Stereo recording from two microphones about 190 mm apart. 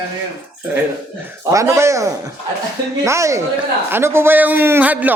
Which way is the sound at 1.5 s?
15° right (ahead or behind).